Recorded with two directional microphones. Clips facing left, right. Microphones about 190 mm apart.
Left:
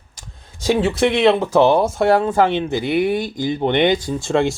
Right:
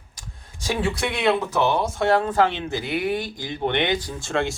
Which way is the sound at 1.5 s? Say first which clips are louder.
Left 8 dB; 30° left (ahead or behind).